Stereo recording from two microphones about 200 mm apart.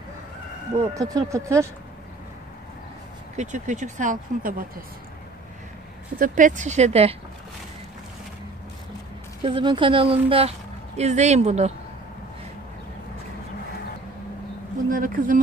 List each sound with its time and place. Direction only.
0.7 s speech: 15° right (ahead or behind)
3.3 s speech: 40° right (ahead or behind)
6.1 s speech: 45° right (ahead or behind)
9.4 s speech: 25° right (ahead or behind)
14.9 s speech: 45° right (ahead or behind)